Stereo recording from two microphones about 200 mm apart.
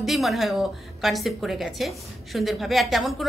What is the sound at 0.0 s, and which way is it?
A woman's voice, centre (ahead or behind).